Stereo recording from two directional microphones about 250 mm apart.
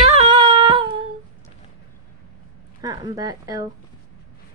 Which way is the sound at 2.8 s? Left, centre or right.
Centre.